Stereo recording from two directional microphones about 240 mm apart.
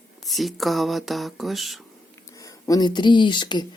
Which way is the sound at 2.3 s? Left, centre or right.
Centre.